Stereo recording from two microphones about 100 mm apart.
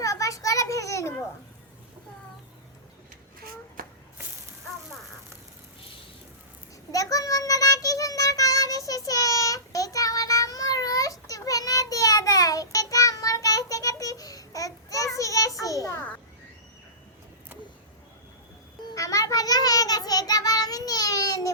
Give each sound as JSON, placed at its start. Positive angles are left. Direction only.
{"t": 0.0, "sound": "a sound", "side_deg": 35}
{"t": 6.9, "sound": "child singing", "side_deg": 35}
{"t": 18.9, "sound": "child singing", "side_deg": 35}